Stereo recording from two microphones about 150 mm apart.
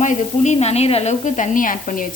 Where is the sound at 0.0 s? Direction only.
55° left (ahead or behind).